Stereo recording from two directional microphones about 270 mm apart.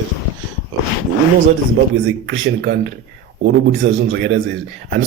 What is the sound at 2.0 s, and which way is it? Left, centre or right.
A man's voice, right.